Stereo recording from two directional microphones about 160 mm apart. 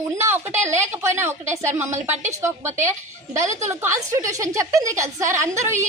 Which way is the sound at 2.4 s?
15° right (ahead or behind).